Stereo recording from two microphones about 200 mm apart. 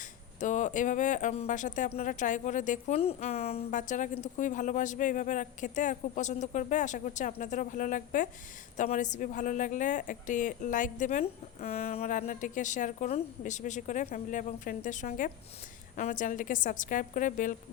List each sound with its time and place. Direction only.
0.3 s speech: 40° left (ahead or behind)